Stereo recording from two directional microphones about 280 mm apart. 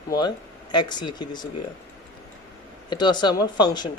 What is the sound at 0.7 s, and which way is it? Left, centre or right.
Speech, centre.